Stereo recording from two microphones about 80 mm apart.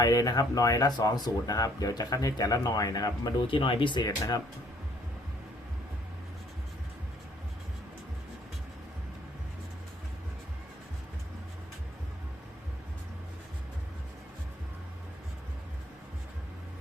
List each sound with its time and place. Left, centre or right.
0.0 s speech: left
3.4 s speech: left
4.0 s speech: left